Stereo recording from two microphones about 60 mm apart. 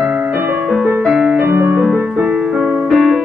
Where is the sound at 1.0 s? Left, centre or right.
Centre.